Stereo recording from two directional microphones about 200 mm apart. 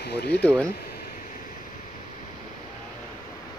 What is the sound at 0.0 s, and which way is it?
Speech, 55° left (ahead or behind).